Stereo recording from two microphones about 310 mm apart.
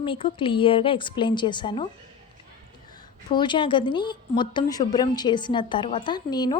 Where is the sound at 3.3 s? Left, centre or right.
Centre.